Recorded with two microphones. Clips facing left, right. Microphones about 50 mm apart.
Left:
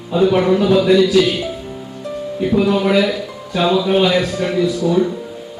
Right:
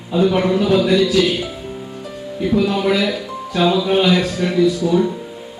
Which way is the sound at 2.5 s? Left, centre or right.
Left.